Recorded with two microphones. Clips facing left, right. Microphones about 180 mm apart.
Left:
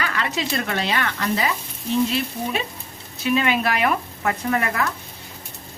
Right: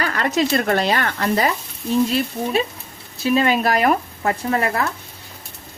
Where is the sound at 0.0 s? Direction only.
40° right (ahead or behind).